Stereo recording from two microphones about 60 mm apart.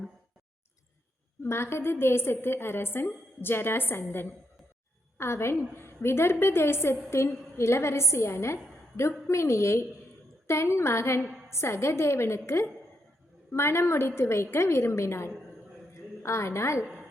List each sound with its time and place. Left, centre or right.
1.5 s a woman's voice: left
5.1 s a woman's voice: left
11.2 s a sound: centre
11.5 s a woman's voice: left
13.5 s a woman's voice: left
16.0 s a sound: left